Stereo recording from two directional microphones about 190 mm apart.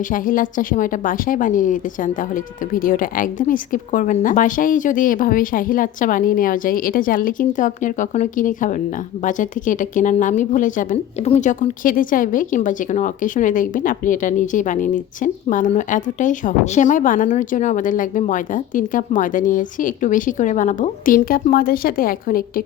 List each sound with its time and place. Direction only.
0.1 s a woman's voice: 45° left (ahead or behind)